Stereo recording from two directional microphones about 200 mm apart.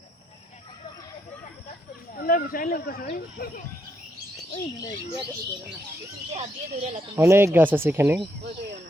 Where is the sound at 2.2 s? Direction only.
45° left (ahead or behind).